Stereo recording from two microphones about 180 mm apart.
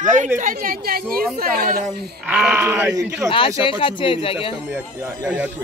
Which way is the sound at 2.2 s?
10° right (ahead or behind).